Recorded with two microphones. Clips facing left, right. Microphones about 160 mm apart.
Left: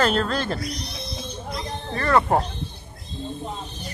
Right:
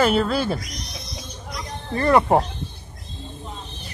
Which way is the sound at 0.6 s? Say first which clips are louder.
Left 5 dB; 30° left (ahead or behind).